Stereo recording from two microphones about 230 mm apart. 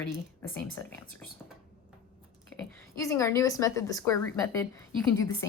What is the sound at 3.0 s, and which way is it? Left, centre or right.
A woman's voice, centre.